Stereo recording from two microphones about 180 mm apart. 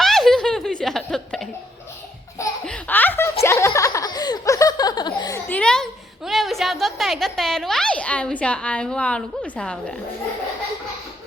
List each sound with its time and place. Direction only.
0.0 s giggle: centre (ahead or behind)
2.6 s baby laughter: 5° left (ahead or behind)
3.4 s laughter: 15° left (ahead or behind)
5.5 s a sound: 5° left (ahead or behind)